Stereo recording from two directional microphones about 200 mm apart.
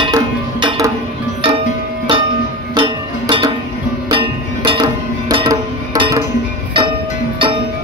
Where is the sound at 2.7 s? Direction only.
25° right (ahead or behind).